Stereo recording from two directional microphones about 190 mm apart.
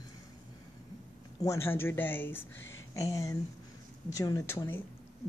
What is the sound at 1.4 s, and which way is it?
Speech, 15° left (ahead or behind).